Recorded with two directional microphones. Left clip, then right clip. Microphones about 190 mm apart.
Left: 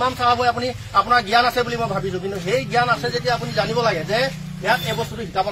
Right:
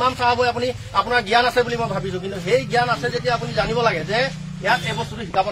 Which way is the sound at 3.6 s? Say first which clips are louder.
Right 1 dB; 40° left (ahead or behind).